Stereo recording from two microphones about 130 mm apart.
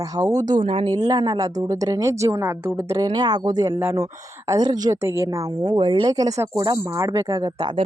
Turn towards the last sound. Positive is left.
turn(degrees=-30)  # may be behind; listen again after turning